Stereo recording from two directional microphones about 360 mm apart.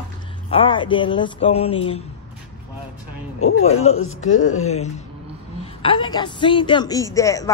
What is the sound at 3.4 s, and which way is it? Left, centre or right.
Speech, left.